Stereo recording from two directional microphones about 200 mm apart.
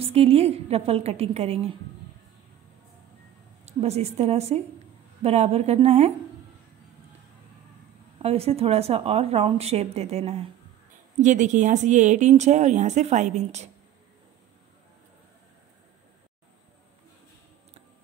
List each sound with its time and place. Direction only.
0.0 s speech: 30° right (ahead or behind)
3.6 s speech: 30° right (ahead or behind)
8.2 s speech: 30° right (ahead or behind)